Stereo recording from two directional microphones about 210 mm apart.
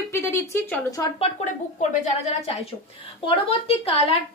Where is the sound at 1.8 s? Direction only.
35° left (ahead or behind).